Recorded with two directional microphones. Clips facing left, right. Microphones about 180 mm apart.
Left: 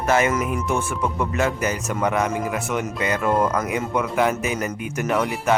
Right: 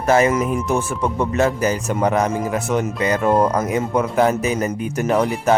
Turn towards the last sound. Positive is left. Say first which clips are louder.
# right 4 dB
turn(degrees=-35)  # may be behind; listen again after turning